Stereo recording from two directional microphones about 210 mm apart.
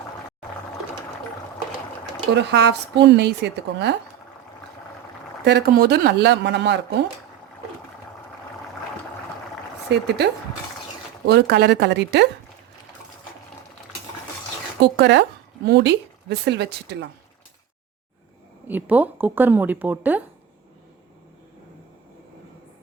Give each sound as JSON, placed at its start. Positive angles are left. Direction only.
{"t": 2.3, "sound": "speech", "side_deg": -55}
{"t": 5.5, "sound": "speech", "side_deg": -50}
{"t": 9.9, "sound": "speech", "side_deg": -55}
{"t": 11.3, "sound": "speech", "side_deg": -50}
{"t": 14.8, "sound": "speech", "side_deg": -55}
{"t": 18.7, "sound": "a woman's voice", "side_deg": -10}